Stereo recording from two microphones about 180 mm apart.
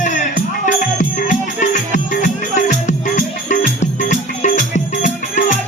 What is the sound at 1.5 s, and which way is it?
Music, 45° left (ahead or behind).